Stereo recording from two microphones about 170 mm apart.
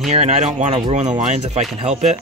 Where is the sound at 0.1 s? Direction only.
40° right (ahead or behind).